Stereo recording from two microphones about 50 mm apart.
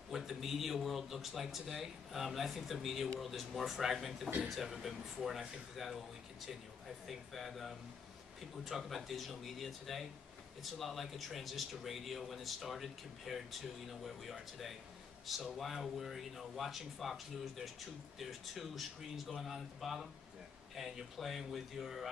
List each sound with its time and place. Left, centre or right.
0.1 s speech: centre